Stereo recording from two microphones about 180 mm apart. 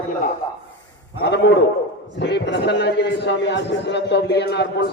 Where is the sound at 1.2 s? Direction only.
70° left (ahead or behind).